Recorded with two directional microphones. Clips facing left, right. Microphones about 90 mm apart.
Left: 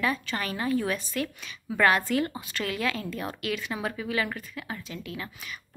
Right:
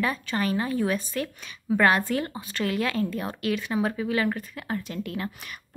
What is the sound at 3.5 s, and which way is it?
Speech, 25° right (ahead or behind).